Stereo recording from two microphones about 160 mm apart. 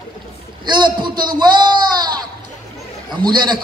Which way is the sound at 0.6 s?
30° right (ahead or behind).